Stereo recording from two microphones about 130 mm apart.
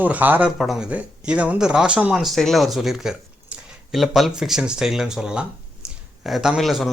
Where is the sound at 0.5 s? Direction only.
Centre (ahead or behind).